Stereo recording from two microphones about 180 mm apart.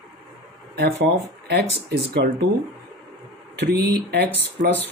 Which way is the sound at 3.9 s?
65° right (ahead or behind).